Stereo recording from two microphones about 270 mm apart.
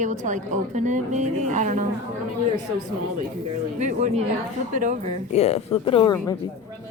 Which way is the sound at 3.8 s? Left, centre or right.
Right.